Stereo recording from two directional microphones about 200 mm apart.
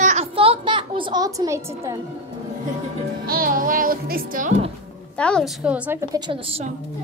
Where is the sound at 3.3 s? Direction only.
45° right (ahead or behind).